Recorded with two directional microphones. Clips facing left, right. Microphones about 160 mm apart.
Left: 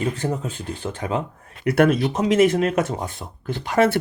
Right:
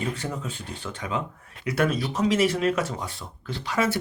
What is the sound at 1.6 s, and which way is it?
Speech, 60° left (ahead or behind).